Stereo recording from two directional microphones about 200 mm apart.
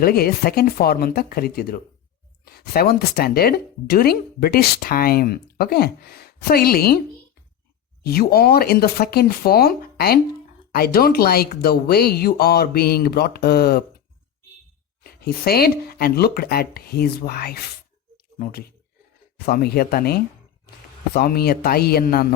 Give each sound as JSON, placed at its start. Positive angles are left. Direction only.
{"t": 0.0, "sound": "speech", "side_deg": 50}
{"t": 8.0, "sound": "speech", "side_deg": 50}
{"t": 15.0, "sound": "speech", "side_deg": 50}